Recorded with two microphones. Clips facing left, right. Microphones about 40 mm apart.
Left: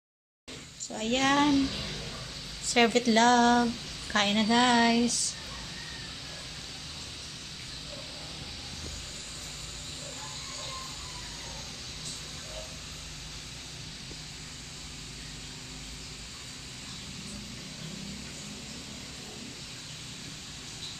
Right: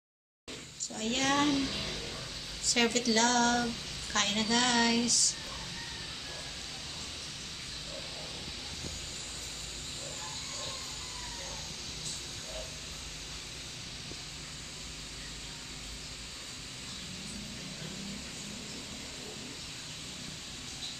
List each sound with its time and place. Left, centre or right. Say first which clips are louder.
1.0 s a woman's voice: left 4 dB; left
1.5 s a child's voice: left 5 dB; centre
2.6 s a woman's voice: left 5 dB; left